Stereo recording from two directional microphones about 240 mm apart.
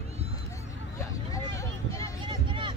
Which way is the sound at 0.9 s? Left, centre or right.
Centre.